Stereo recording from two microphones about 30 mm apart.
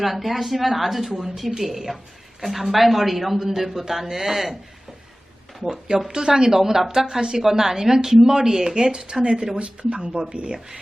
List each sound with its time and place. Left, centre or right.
0.0 s a woman's voice: centre
6.1 s a woman's voice: right